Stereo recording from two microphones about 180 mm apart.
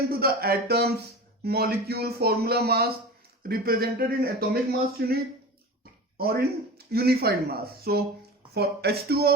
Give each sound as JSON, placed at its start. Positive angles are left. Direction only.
{"t": 0.1, "sound": "speech", "side_deg": -55}